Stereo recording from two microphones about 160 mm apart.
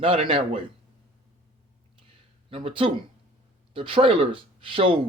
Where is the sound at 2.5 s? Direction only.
35° right (ahead or behind).